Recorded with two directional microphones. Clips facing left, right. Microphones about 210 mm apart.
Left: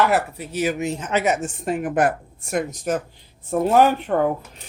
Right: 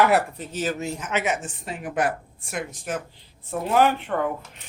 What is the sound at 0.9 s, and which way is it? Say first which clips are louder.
A woman's voice: left 5 dB; 30° left (ahead or behind).